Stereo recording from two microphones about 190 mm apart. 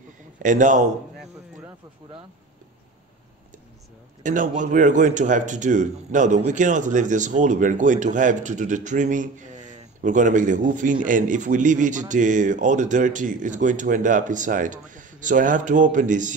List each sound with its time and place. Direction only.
0.4 s speech: 40° right (ahead or behind)
4.2 s speech: 45° right (ahead or behind)